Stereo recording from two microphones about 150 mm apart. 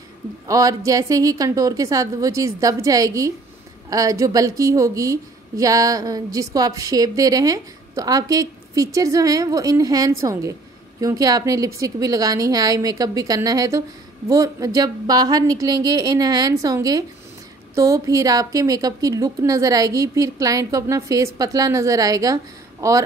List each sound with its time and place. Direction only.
0.5 s a woman's voice: 25° right (ahead or behind)